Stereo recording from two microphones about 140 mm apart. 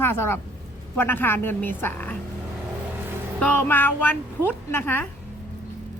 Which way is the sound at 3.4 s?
10° left (ahead or behind).